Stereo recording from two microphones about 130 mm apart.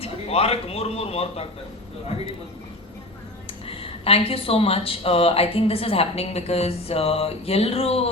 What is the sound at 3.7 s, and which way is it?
A woman's voice, 45° left (ahead or behind).